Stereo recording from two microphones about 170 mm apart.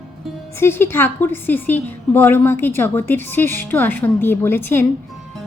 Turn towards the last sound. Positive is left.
turn(degrees=10)  # may be behind; listen again after turning